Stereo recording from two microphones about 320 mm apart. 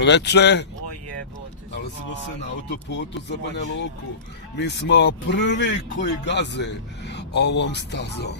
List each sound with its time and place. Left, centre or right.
0.0 s speech: left
2.6 s speech: left